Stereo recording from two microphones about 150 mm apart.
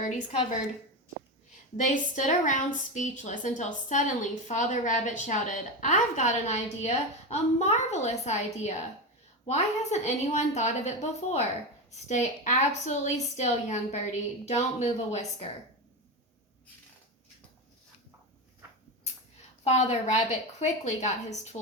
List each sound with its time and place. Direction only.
0.0 s a woman's voice: 50° left (ahead or behind)
1.7 s a woman's voice: 55° left (ahead or behind)
19.6 s a woman's voice: 50° left (ahead or behind)